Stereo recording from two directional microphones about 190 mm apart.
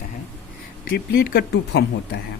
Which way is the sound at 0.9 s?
50° left (ahead or behind).